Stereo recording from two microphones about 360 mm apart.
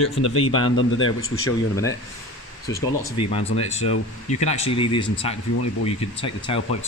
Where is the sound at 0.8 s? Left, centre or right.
Left.